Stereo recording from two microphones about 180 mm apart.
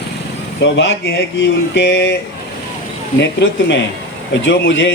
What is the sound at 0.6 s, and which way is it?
Speech, 80° left.